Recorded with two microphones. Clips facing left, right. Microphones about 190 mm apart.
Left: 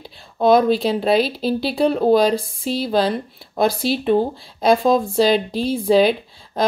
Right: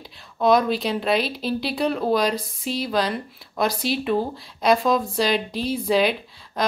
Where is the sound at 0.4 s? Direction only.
30° left (ahead or behind).